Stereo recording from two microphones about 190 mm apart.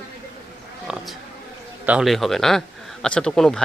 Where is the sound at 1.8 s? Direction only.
5° right (ahead or behind).